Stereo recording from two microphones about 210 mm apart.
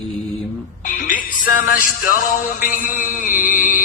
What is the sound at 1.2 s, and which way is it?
Music, 40° left (ahead or behind).